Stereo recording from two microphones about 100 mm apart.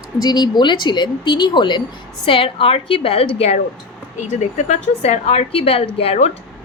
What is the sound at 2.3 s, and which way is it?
Speech, 65° left (ahead or behind).